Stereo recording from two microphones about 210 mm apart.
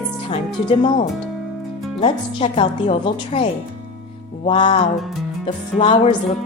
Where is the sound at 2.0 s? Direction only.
30° left (ahead or behind).